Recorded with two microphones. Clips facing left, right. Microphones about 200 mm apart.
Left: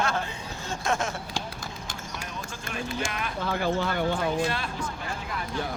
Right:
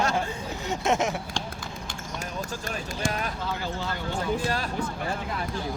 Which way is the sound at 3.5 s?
60° left (ahead or behind).